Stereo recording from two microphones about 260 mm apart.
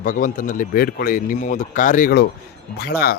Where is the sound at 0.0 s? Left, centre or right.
Left.